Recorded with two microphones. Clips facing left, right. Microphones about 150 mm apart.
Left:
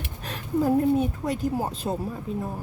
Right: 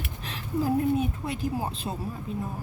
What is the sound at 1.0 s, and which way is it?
Speech, 40° left (ahead or behind).